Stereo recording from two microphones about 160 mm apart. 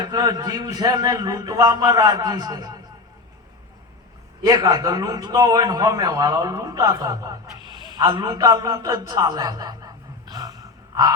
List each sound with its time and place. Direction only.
0.0 s a man's voice: 25° right (ahead or behind)
4.4 s a man's voice: 25° right (ahead or behind)